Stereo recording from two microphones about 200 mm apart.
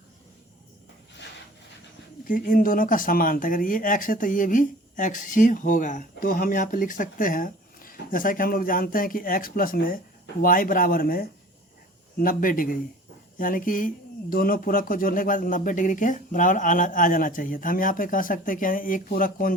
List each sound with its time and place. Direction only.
2.2 s speech: 45° left (ahead or behind)